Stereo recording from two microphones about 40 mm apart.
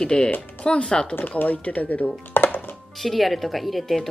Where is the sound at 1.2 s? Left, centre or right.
Left.